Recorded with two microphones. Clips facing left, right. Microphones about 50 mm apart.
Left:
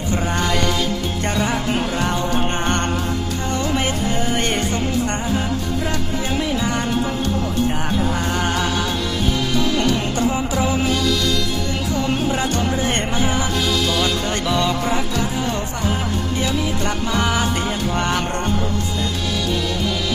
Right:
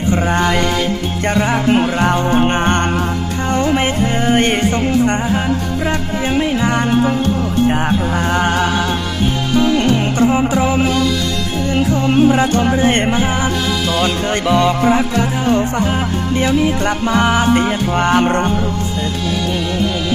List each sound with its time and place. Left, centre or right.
0.1 s music: right
8.4 s music: right